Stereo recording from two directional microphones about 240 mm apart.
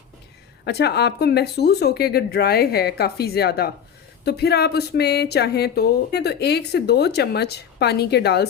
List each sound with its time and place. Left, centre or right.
0.6 s speech: left